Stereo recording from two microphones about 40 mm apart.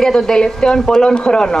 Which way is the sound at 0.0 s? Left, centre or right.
Centre.